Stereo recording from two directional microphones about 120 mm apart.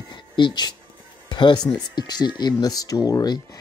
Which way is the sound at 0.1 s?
40° left (ahead or behind).